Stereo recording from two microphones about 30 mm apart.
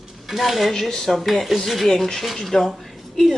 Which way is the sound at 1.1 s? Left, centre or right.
Centre.